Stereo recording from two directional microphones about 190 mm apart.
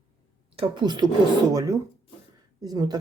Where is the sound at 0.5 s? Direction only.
25° right (ahead or behind).